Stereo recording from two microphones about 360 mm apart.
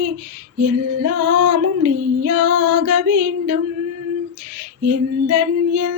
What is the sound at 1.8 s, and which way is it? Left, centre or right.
Female singing, right.